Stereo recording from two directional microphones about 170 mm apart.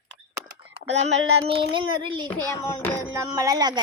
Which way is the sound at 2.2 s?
15° left (ahead or behind).